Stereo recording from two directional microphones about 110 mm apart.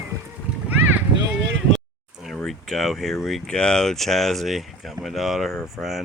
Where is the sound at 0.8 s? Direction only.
15° right (ahead or behind).